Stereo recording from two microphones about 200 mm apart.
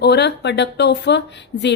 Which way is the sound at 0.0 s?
55° left (ahead or behind).